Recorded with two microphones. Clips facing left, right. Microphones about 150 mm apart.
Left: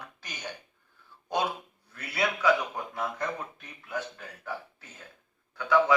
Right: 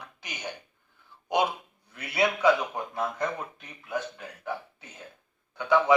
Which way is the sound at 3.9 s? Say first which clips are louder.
Right 3 dB; 20° right (ahead or behind).